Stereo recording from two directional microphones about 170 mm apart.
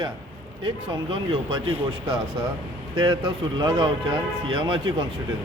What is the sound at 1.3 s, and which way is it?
Speech, 30° right (ahead or behind).